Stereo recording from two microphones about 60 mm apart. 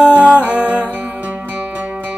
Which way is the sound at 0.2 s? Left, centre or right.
Right.